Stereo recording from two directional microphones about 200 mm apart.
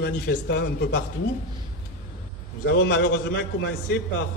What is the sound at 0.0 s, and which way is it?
A man's voice, 60° left (ahead or behind).